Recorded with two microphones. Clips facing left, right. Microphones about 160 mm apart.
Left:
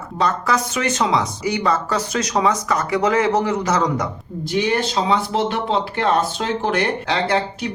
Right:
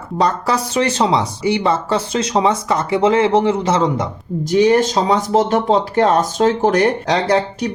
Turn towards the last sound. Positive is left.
turn(degrees=-40)  # may be behind; listen again after turning